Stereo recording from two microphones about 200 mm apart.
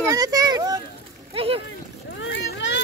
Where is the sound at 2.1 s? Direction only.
65° left (ahead or behind).